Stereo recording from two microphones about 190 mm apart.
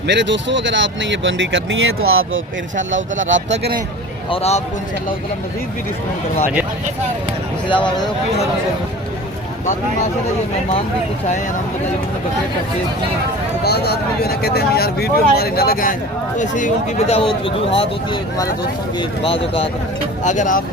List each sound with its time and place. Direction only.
0.1 s speech: 70° right (ahead or behind)
4.3 s speech: 30° left (ahead or behind)
13.7 s speech: 60° left (ahead or behind); by 17.2 s 40° left (ahead or behind)
17.2 s speech: 30° left (ahead or behind)
20.2 s speech: 40° left (ahead or behind)